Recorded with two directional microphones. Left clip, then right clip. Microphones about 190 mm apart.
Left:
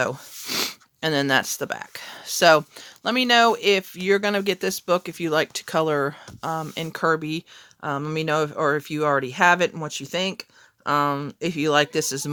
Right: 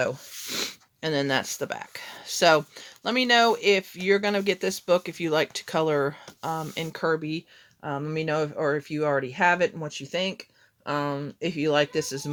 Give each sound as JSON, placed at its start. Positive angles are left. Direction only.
{"t": 0.0, "sound": "speech", "side_deg": 45}
{"t": 6.9, "sound": "speech", "side_deg": 35}